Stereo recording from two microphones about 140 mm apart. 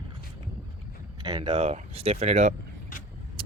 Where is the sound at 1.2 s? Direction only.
30° right (ahead or behind).